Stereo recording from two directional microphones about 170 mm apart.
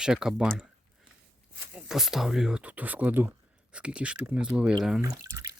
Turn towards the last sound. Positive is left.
turn(degrees=-20)  # may be behind; listen again after turning